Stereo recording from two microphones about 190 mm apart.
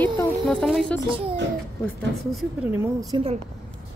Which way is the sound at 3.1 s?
30° right (ahead or behind).